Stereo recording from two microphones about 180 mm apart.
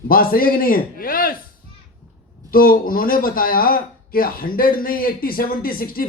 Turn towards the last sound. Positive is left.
turn(degrees=55)  # may be behind; listen again after turning